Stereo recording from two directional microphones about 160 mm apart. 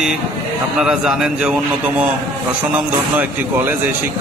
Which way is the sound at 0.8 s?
5° right (ahead or behind).